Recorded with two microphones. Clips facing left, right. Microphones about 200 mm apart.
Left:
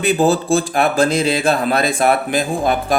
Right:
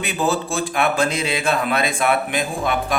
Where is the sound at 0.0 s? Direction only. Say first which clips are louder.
Left 7 dB; 35° left (ahead or behind).